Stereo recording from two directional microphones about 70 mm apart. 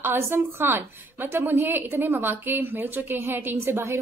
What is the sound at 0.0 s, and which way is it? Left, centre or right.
A woman's voice, right.